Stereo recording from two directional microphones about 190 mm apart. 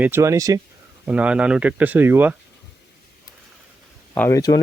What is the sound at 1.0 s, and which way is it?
Speech, 5° right (ahead or behind).